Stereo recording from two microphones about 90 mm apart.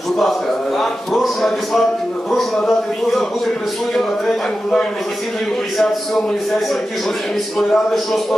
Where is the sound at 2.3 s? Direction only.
5° left (ahead or behind).